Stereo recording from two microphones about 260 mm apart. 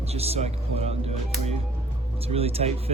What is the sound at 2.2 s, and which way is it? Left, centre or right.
Speech, right.